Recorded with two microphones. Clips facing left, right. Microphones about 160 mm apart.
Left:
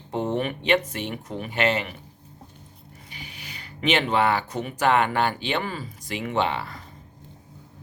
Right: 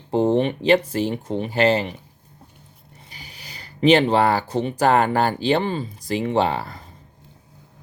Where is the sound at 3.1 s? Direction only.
35° right (ahead or behind).